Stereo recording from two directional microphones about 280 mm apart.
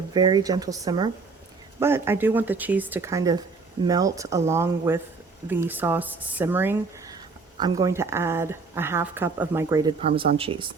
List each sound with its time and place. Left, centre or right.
0.1 s speech: centre
10.0 s speech: right